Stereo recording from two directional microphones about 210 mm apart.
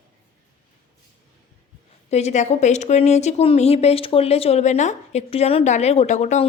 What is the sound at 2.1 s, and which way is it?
A woman's voice, 30° left (ahead or behind).